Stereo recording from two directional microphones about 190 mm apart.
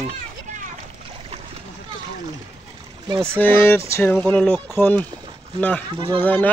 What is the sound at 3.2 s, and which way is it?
Speech, 10° left (ahead or behind).